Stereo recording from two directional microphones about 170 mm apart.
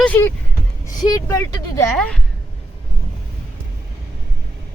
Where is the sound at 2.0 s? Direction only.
5° left (ahead or behind).